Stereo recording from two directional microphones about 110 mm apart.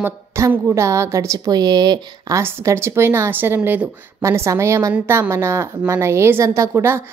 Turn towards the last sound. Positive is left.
turn(degrees=-25)  # may be behind; listen again after turning